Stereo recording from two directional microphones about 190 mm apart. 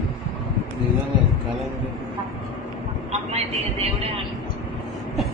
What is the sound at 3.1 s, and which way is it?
A woman's voice, 35° right (ahead or behind).